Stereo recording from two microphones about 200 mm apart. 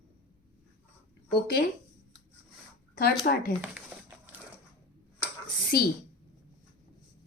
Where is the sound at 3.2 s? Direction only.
45° left (ahead or behind).